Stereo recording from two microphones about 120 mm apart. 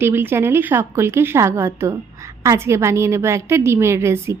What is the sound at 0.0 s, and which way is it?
A woman's voice, 20° right (ahead or behind).